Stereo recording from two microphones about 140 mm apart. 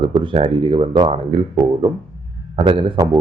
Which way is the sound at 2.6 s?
40° right (ahead or behind).